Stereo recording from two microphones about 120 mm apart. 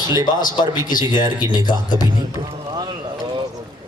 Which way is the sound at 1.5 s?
35° left (ahead or behind).